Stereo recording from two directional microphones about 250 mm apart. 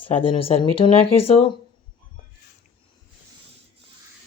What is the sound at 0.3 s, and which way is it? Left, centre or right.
Speech, left.